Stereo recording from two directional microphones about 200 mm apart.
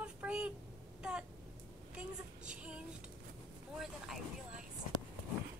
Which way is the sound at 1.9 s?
5° right (ahead or behind).